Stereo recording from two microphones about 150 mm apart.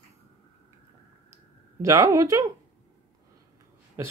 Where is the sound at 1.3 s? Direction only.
20° right (ahead or behind).